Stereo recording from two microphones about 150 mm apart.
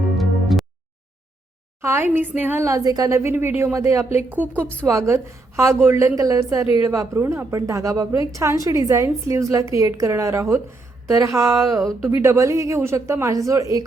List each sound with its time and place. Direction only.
0.2 s music: centre (ahead or behind)
1.8 s a woman's voice: 15° right (ahead or behind)
4.6 s a woman's voice: 10° left (ahead or behind)
4.9 s a woman's voice: 20° right (ahead or behind)